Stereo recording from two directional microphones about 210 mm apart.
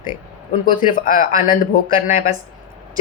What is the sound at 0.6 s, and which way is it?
Speech, 40° left (ahead or behind).